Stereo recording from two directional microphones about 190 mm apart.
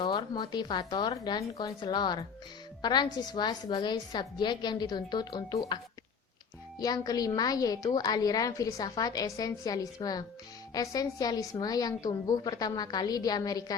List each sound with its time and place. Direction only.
0.0 s a woman's voice: 25° left (ahead or behind)
6.7 s a woman's voice: 20° left (ahead or behind)